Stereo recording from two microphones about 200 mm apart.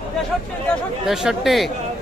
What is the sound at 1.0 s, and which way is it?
Speech, centre (ahead or behind).